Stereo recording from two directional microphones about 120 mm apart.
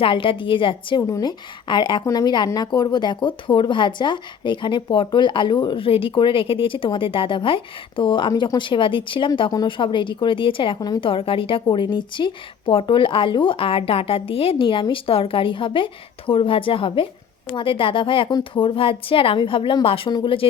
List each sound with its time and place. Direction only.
0.0 s speech: 45° left (ahead or behind)
11.1 s speech: 50° left (ahead or behind)
20.1 s speech: 40° left (ahead or behind)